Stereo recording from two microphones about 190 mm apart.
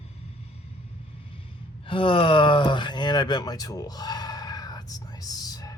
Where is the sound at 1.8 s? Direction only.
25° left (ahead or behind).